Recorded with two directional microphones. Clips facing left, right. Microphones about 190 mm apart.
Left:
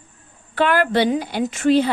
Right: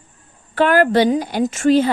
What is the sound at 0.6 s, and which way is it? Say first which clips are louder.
A woman's voice: right 4 dB; 45° right (ahead or behind).